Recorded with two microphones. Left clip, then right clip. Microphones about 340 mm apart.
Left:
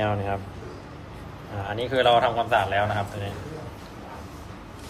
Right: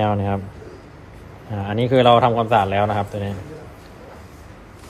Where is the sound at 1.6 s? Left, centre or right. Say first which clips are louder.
Right 6 dB; centre.